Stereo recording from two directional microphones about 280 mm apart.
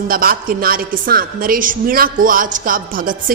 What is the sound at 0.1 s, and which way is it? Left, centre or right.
A woman's voice, right.